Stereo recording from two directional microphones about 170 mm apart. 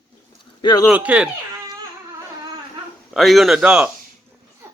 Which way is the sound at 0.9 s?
5° right (ahead or behind).